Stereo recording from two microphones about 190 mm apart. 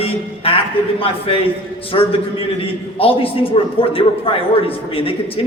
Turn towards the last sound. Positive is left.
turn(degrees=30)  # may be behind; listen again after turning